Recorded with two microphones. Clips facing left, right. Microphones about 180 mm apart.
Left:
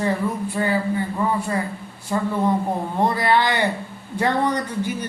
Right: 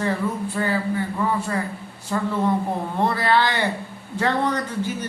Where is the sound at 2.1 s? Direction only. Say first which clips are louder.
Left 1 dB; 15° left (ahead or behind).